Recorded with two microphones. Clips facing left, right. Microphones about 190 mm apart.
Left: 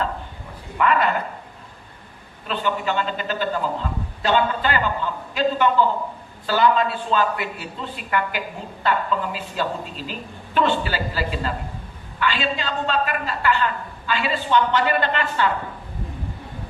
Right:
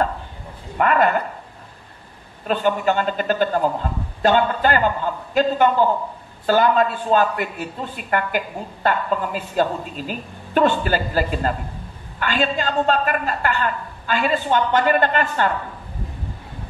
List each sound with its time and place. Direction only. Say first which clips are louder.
0.7 s a man's voice: right 2 dB; 50° right (ahead or behind)
2.4 s a man's voice: right 5 dB; 45° right (ahead or behind)